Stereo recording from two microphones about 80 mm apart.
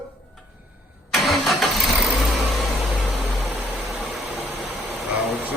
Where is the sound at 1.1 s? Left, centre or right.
Centre.